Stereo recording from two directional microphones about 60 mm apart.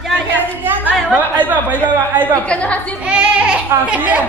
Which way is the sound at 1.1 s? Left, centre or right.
Right.